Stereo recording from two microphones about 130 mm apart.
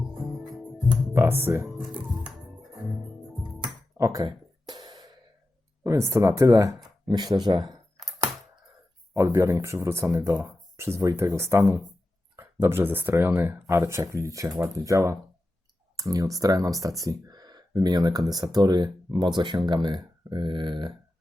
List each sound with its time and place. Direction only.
0.0 s music: centre (ahead or behind)
1.1 s speech: 20° right (ahead or behind)
3.4 s music: centre (ahead or behind)
3.9 s gasp: 25° right (ahead or behind)
5.8 s speech: 20° right (ahead or behind)
7.9 s computer keyboard: 30° right (ahead or behind)
9.1 s speech: 20° right (ahead or behind)